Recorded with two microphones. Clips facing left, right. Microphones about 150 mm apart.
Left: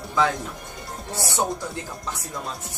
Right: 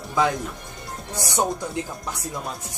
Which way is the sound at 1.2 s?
15° right (ahead or behind).